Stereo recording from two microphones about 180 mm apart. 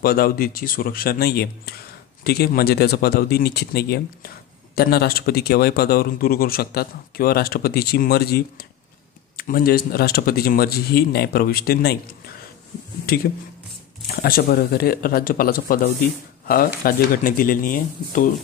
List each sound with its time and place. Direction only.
0.0 s speech: 55° left (ahead or behind)
13.0 s speech: 55° left (ahead or behind)